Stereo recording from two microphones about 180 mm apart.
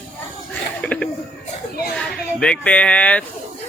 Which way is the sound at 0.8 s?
5° left (ahead or behind).